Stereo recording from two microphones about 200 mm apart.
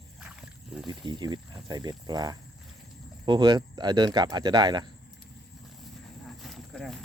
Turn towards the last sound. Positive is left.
turn(degrees=0)  # may be behind; listen again after turning